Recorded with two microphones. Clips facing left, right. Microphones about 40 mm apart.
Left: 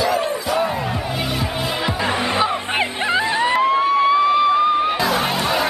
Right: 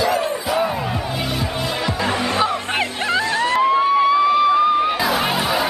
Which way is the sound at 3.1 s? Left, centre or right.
Centre.